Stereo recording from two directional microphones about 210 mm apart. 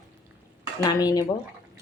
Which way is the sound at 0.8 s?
15° left (ahead or behind).